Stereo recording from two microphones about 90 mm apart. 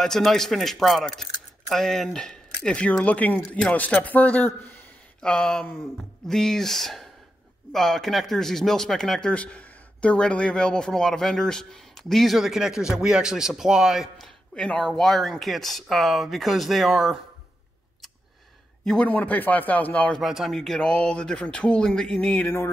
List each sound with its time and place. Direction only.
0.0 s speech: 5° left (ahead or behind); by 4.7 s 20° left (ahead or behind)
5.2 s speech: 5° left (ahead or behind)
14.5 s speech: 10° left (ahead or behind)
19.0 s speech: 20° left (ahead or behind)
20.2 s speech: 5° right (ahead or behind); by 22.5 s 10° left (ahead or behind)